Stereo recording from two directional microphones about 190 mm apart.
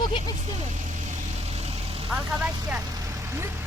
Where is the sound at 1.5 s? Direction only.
30° right (ahead or behind).